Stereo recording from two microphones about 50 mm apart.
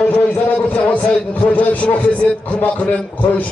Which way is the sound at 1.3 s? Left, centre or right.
Left.